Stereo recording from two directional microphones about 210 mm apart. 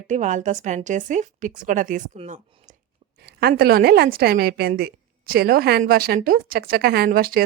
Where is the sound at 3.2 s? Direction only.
50° right (ahead or behind).